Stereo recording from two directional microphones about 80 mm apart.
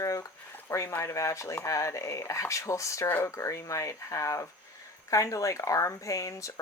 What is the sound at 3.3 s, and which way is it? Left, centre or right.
Speech, left.